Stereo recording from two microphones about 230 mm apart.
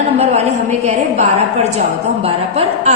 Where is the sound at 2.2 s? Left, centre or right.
Right.